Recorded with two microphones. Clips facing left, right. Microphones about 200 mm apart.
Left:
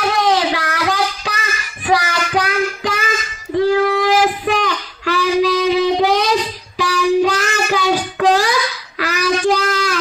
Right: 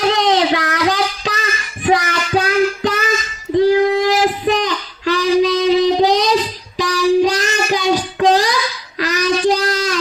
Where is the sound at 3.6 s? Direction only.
20° right (ahead or behind).